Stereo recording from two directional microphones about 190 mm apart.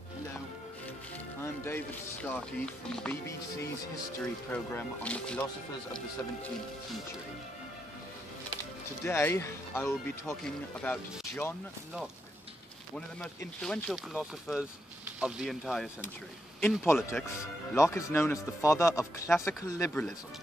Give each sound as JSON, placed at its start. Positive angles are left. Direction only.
{"t": 2.2, "sound": "speech", "side_deg": 5}
{"t": 3.3, "sound": "speech", "side_deg": 15}
{"t": 9.0, "sound": "speech", "side_deg": 15}
{"t": 13.6, "sound": "speech", "side_deg": 0}
{"t": 16.8, "sound": "speech", "side_deg": 15}